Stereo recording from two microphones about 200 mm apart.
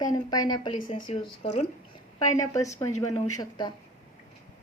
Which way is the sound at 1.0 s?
25° left (ahead or behind).